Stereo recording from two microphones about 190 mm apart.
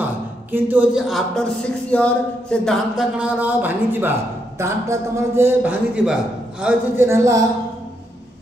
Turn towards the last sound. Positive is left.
turn(degrees=-15)  # may be behind; listen again after turning